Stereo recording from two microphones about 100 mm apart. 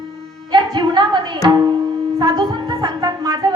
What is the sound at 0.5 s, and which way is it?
Music, 50° right (ahead or behind).